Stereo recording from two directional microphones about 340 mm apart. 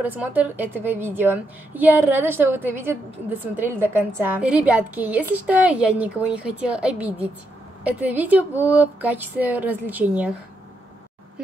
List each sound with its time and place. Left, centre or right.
0.0 s a woman's voice: centre